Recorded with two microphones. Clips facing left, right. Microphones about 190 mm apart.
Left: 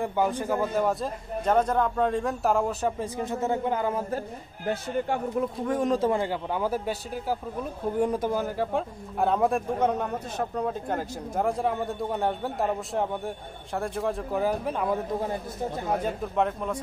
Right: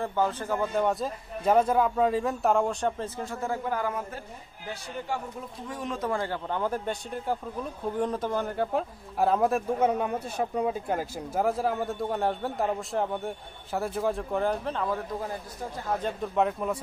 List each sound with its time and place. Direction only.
0.0 s a man's voice: 15° left (ahead or behind)
3.2 s a man's voice: 20° left (ahead or behind)
4.6 s speech: 55° left (ahead or behind)
5.9 s a man's voice: 20° left (ahead or behind)
16.3 s a man's voice: 5° right (ahead or behind)